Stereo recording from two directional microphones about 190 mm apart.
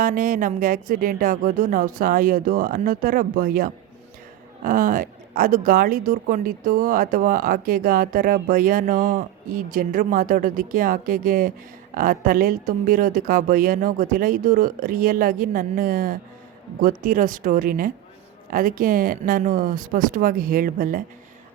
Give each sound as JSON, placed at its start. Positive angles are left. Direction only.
{"t": 0.0, "sound": "a woman's voice", "side_deg": -45}